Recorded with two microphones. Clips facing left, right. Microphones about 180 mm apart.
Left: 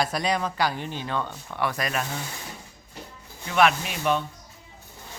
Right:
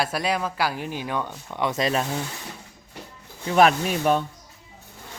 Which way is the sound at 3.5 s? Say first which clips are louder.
Right 4 dB; 40° right (ahead or behind).